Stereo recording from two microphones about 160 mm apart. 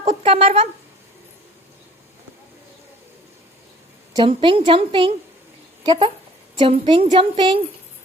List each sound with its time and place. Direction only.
0.0 s speech: 35° right (ahead or behind)
4.1 s a woman's voice: 30° right (ahead or behind)